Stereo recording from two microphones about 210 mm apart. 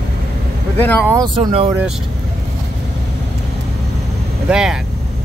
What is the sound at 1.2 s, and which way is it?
Speech, 20° right (ahead or behind).